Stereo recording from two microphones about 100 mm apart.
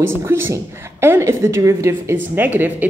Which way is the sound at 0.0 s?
25° right (ahead or behind).